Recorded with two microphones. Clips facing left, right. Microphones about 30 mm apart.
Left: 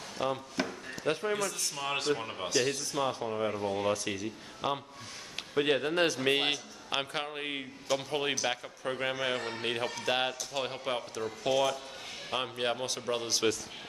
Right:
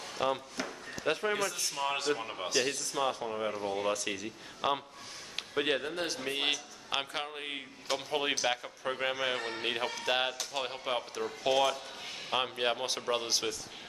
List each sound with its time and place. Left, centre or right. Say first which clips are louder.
0.2 s a man's voice: right 1 dB; centre
0.6 s speech: left 4 dB; left
1.0 s a man's voice: even; centre
1.9 s a man's voice: left 2 dB; centre
5.3 s a sound: left 3 dB; centre
5.9 s a man's voice: left 8 dB; left
6.9 s a man's voice: left 1 dB; centre
8.1 s a man's voice: even; centre
11.4 s a man's voice: even; centre